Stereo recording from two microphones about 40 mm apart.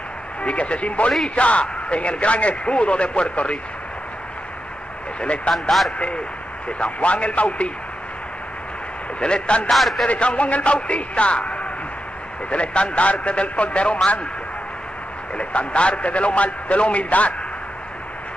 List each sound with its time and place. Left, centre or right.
0.4 s speech: left
5.2 s speech: left
5.5 s speech: centre
6.8 s speech: left
9.2 s a man's voice: left
9.7 s speech: centre
10.0 s speech: left
15.3 s speech: left